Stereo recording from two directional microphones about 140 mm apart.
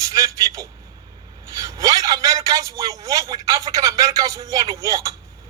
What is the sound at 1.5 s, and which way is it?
A man's voice, 25° right (ahead or behind).